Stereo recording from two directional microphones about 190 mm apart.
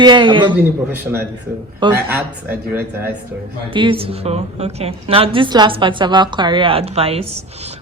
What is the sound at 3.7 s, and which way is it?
A woman's voice, 30° right (ahead or behind).